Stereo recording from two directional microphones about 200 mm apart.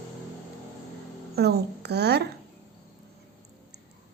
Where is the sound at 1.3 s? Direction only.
55° right (ahead or behind).